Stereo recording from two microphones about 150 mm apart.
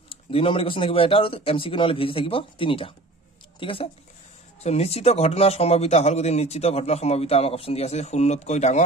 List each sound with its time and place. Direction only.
0.3 s speech: 40° left (ahead or behind)